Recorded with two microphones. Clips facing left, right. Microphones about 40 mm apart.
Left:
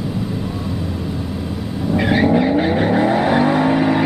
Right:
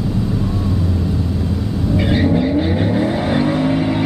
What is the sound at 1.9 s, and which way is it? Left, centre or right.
Vehicle, left.